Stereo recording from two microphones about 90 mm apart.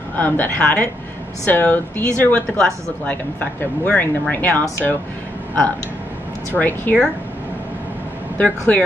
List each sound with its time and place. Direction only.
0.2 s speech: 20° left (ahead or behind)
6.5 s speech: 20° left (ahead or behind)
8.4 s speech: 15° left (ahead or behind)